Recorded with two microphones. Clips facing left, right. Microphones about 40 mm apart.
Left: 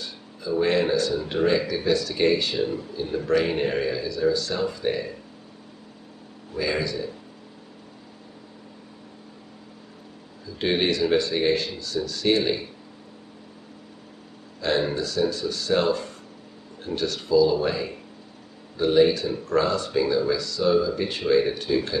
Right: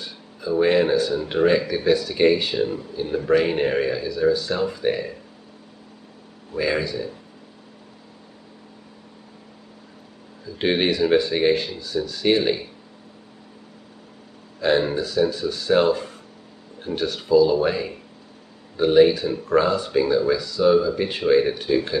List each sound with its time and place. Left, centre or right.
0.0 s a sound: centre
1.3 s speech: centre
6.5 s speech: centre
10.6 s speech: centre
14.6 s speech: centre